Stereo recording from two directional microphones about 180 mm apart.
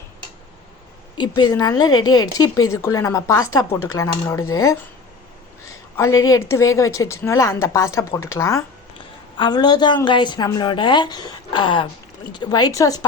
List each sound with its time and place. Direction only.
1.2 s a woman's voice: 20° left (ahead or behind)